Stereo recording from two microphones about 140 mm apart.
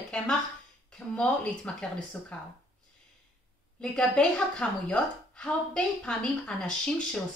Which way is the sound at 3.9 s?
5° left (ahead or behind).